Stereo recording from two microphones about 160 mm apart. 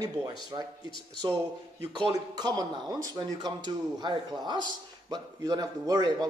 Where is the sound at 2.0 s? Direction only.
30° right (ahead or behind).